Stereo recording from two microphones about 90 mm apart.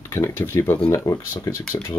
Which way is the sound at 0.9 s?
40° left (ahead or behind).